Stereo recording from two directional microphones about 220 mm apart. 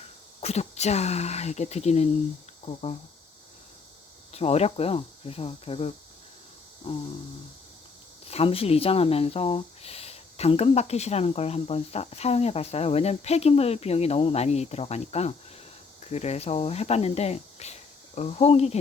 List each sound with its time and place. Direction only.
0.4 s speech: 30° left (ahead or behind)
4.3 s speech: 30° left (ahead or behind)
8.3 s speech: 25° left (ahead or behind)